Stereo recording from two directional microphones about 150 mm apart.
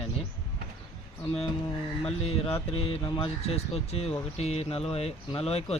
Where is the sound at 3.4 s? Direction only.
45° left (ahead or behind).